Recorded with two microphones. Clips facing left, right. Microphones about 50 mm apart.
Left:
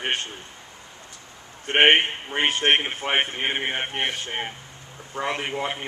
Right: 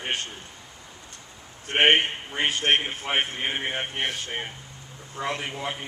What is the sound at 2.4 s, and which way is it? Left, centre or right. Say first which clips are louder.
Speech: left 2 dB; left.